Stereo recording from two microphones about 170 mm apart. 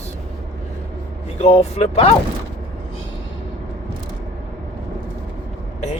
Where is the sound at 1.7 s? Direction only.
40° left (ahead or behind).